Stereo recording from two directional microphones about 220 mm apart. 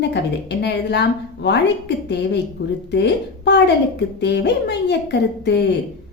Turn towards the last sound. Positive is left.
turn(degrees=50)  # may be behind; listen again after turning